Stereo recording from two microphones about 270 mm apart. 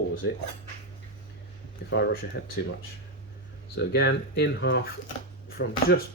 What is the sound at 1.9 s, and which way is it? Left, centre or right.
Speech, left.